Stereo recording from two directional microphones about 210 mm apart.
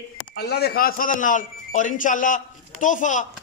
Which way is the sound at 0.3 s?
50° left (ahead or behind).